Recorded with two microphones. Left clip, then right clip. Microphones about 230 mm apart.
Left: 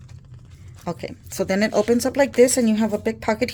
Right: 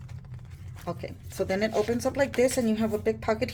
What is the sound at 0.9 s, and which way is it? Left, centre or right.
Speech, left.